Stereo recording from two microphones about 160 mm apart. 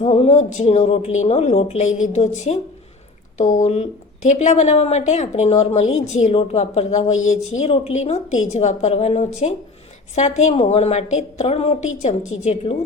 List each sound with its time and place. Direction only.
0.0 s a woman's voice: 40° left (ahead or behind)